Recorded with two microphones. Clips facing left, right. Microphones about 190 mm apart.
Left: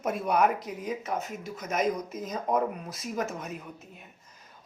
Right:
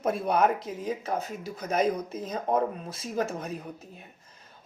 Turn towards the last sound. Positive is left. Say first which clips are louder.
# right 2 dB
turn(degrees=-35)  # may be behind; listen again after turning